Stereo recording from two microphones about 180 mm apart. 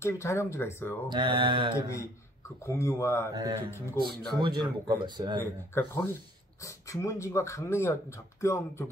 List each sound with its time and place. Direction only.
0.0 s speech: 15° left (ahead or behind)
1.0 s speech: 25° right (ahead or behind)
2.6 s speech: 15° left (ahead or behind)
3.3 s speech: 20° right (ahead or behind)
5.4 s speech: 10° left (ahead or behind)